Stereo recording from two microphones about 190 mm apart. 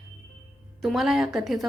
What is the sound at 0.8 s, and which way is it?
Speech, centre (ahead or behind).